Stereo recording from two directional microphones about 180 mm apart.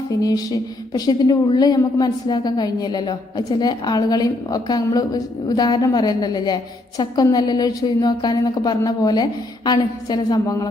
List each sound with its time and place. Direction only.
0.2 s a woman's voice: 20° left (ahead or behind)